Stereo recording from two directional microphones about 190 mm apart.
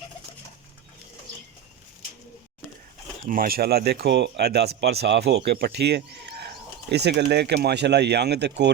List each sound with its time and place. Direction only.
3.2 s speech: 50° right (ahead or behind); by 8.7 s 65° right (ahead or behind)